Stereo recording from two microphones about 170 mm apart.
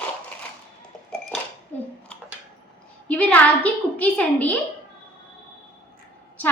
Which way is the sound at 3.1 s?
10° left (ahead or behind).